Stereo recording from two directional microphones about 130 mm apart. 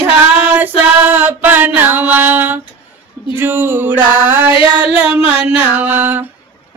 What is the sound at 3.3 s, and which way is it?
A man's voice, 15° right (ahead or behind).